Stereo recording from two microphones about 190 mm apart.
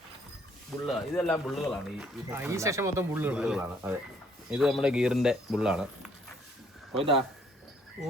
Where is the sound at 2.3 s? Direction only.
15° right (ahead or behind).